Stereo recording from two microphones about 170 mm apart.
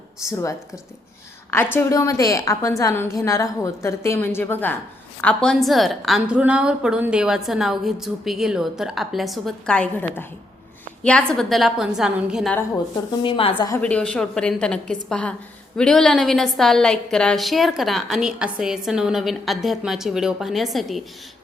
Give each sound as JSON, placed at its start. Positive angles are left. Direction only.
{"t": 0.3, "sound": "a woman's voice", "side_deg": 15}
{"t": 1.7, "sound": "a woman's voice", "side_deg": 20}
{"t": 13.2, "sound": "a woman's voice", "side_deg": 30}
{"t": 13.7, "sound": "a woman's voice", "side_deg": 10}